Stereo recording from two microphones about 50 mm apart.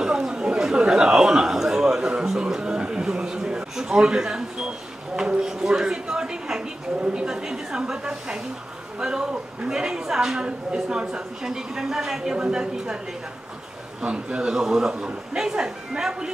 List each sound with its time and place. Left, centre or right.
0.0 s a sound: centre
9.0 s a woman's voice: centre
14.0 s a woman's voice: centre